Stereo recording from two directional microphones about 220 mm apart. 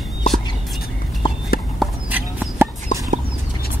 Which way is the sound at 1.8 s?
5° right (ahead or behind).